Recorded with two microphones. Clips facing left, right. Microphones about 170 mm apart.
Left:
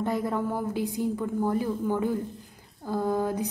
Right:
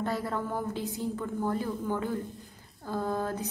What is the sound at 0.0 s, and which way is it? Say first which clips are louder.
A woman's voice: left 4 dB; 15° left (ahead or behind).